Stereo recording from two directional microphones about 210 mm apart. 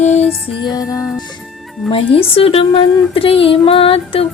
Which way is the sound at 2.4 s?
25° left (ahead or behind).